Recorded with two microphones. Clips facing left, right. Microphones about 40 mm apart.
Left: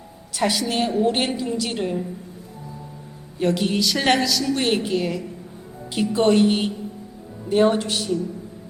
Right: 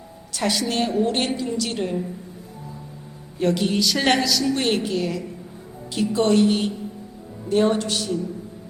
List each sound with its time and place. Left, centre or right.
0.3 s a woman's voice: centre
3.3 s a woman's voice: centre